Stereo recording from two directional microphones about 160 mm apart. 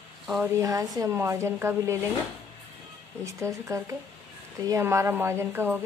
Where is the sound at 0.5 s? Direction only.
20° right (ahead or behind).